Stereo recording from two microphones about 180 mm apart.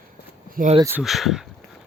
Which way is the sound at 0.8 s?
10° right (ahead or behind).